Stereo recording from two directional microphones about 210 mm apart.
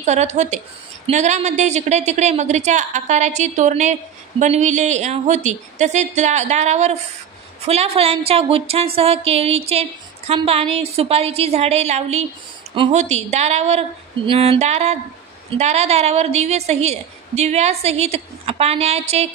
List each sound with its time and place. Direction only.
0.0 s a woman's voice: 35° right (ahead or behind)